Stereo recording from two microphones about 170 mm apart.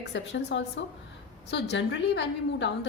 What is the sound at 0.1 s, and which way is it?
Speech, 90° left.